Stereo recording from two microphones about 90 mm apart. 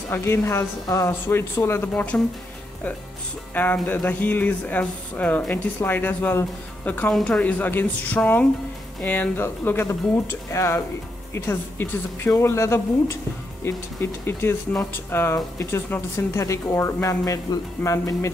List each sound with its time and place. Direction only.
0.1 s speech: 25° left (ahead or behind)
3.5 s speech: 20° left (ahead or behind)
7.1 s a woman's voice: 10° left (ahead or behind); by 18.3 s 35° left (ahead or behind)